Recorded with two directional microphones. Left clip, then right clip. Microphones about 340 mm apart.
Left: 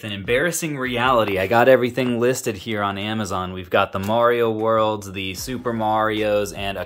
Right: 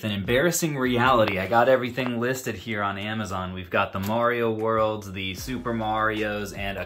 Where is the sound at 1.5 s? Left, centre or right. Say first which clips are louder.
Left 8 dB; left.